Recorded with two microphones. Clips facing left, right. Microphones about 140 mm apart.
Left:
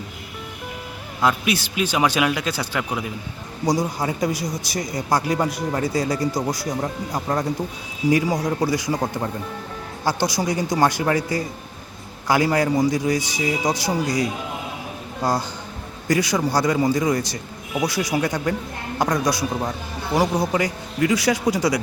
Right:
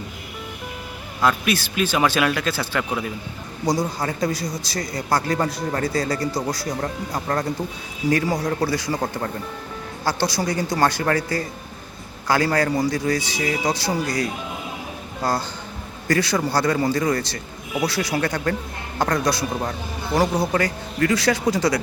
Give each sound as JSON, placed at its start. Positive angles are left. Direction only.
{"t": 1.2, "sound": "a man's voice", "side_deg": 20}
{"t": 10.0, "sound": "a man's voice", "side_deg": 15}
{"t": 19.5, "sound": "speech", "side_deg": 0}
{"t": 20.1, "sound": "a man's voice", "side_deg": 15}